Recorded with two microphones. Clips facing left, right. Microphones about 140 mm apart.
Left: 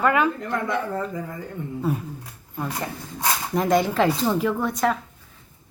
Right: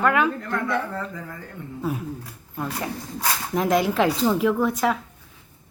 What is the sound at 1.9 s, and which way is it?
Speech, centre (ahead or behind).